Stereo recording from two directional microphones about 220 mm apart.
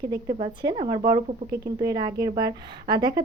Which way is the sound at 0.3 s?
25° right (ahead or behind).